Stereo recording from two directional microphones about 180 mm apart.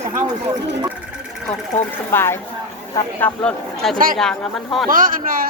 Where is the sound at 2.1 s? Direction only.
15° left (ahead or behind).